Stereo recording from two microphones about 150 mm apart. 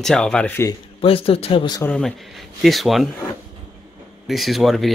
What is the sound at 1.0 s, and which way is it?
Speech, 40° left (ahead or behind).